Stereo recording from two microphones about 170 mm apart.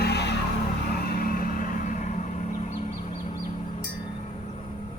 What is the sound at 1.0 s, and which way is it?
Vehicle, 60° left (ahead or behind).